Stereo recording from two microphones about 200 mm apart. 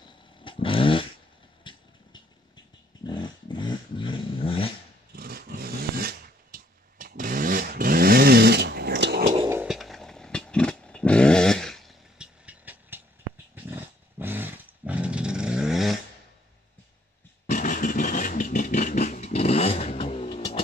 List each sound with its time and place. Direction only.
0.4 s vehicle: 25° left (ahead or behind)
3.1 s dog: 20° left (ahead or behind)
5.1 s a sound: 50° right (ahead or behind)
9.5 s vehicle: 5° right (ahead or behind)
13.7 s dog: 10° right (ahead or behind)
17.5 s vehicle: 40° left (ahead or behind)